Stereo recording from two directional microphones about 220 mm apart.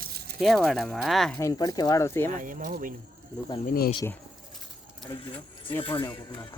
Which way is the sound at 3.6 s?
45° left (ahead or behind).